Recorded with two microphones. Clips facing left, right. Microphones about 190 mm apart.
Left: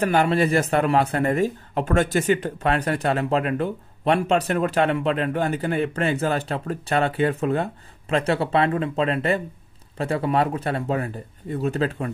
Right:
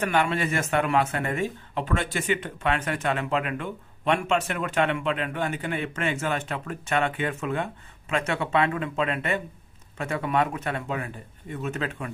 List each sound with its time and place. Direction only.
0.0 s speech: 35° left (ahead or behind)